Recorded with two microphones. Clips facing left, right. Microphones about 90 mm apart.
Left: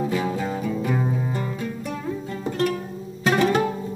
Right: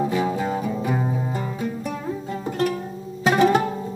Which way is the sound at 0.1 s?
20° right (ahead or behind).